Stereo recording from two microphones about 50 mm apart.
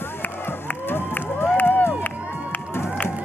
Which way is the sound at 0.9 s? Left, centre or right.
Left.